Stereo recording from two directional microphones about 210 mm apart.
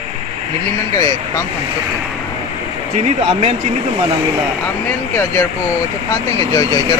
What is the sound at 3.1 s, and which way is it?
Speech, 30° right (ahead or behind).